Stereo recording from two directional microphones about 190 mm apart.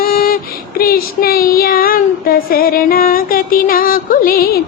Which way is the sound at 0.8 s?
50° left (ahead or behind).